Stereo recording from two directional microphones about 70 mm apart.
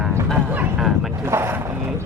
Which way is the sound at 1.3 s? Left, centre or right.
Right.